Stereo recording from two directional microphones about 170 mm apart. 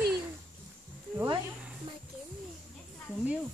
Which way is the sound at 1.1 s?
25° right (ahead or behind).